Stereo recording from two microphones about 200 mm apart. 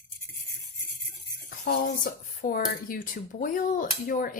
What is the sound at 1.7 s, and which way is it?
Speech, 45° left (ahead or behind).